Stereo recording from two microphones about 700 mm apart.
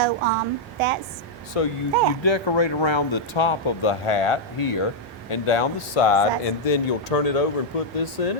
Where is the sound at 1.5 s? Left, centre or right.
Left.